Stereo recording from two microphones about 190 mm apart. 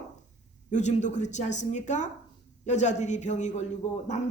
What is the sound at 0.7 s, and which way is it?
Speech, 40° left (ahead or behind).